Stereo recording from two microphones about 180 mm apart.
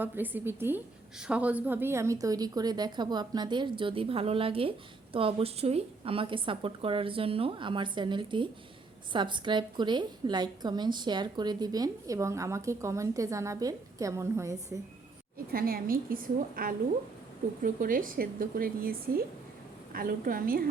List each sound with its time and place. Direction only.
0.0 s a woman's voice: 10° right (ahead or behind)
15.5 s speech: 55° right (ahead or behind)